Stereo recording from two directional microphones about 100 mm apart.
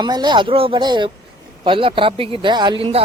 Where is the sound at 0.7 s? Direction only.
50° right (ahead or behind).